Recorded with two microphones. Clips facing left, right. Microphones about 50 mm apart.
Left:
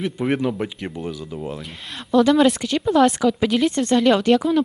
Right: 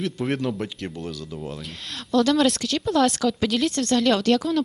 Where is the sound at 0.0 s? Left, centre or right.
Centre.